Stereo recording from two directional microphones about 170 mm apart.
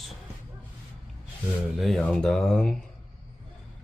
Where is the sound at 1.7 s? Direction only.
Centre (ahead or behind).